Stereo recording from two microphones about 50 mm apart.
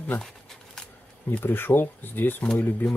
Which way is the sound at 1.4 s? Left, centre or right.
Left.